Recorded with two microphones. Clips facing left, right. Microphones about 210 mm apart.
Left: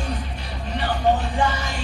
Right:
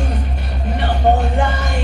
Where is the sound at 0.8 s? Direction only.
60° right (ahead or behind).